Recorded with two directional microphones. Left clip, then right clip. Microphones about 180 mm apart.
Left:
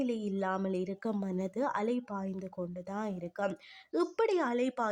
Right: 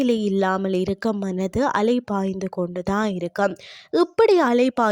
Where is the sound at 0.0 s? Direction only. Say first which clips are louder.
Right 13 dB; 45° right (ahead or behind).